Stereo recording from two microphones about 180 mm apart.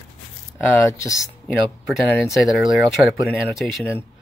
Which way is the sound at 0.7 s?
15° left (ahead or behind).